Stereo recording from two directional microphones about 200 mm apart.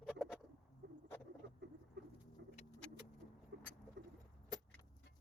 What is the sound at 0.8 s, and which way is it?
Rodents, 60° right (ahead or behind).